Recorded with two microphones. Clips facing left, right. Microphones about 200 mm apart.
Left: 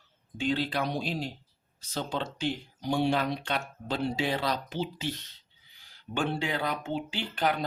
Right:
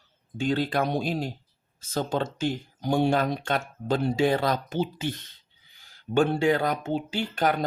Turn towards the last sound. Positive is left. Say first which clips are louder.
# right 4 dB
turn(degrees=-45)  # may be behind; listen again after turning